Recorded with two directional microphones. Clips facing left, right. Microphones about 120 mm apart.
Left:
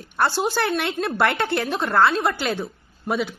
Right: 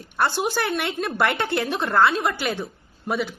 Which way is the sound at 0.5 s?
15° right (ahead or behind).